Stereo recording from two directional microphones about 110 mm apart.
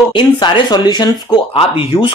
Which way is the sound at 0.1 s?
45° left (ahead or behind).